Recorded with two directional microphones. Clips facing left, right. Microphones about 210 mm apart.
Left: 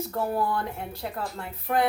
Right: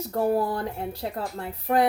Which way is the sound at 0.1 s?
35° right (ahead or behind).